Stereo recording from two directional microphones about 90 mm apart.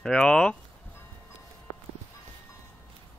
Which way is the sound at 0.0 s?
10° left (ahead or behind).